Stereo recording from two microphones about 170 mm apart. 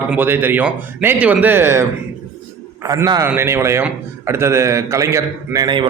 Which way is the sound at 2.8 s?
20° right (ahead or behind).